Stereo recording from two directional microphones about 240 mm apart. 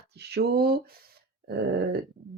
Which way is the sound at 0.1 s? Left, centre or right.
Right.